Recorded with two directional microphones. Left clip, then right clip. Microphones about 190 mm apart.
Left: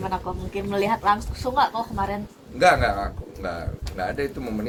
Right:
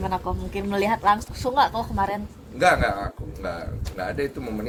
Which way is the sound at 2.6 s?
Centre (ahead or behind).